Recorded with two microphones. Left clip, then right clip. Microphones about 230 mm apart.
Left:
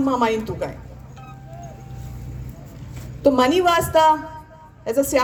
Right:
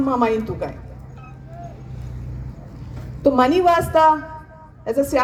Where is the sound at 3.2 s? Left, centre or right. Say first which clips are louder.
Right 1 dB; left.